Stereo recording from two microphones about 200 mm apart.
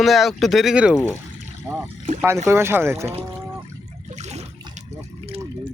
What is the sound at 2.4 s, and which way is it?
Speech, 10° right (ahead or behind).